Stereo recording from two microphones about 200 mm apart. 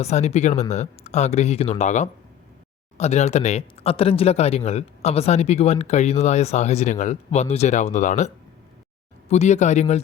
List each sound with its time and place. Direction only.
0.0 s speech: 35° left (ahead or behind)
9.3 s speech: 35° left (ahead or behind)